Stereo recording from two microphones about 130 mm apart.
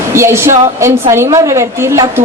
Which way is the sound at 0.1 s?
20° right (ahead or behind).